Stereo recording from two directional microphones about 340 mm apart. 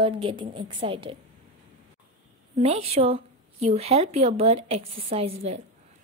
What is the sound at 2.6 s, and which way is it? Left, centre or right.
A woman's voice, centre.